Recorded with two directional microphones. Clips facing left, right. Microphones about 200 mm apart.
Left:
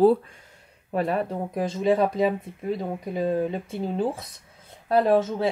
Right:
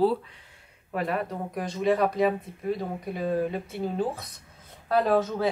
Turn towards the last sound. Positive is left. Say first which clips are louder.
# left 3 dB
turn(degrees=25)  # may be behind; listen again after turning